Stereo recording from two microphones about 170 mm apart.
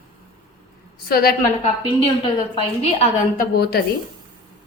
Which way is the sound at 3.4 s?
70° left (ahead or behind).